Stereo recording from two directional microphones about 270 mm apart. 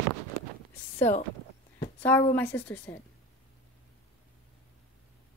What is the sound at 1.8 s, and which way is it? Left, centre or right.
A woman's voice, centre.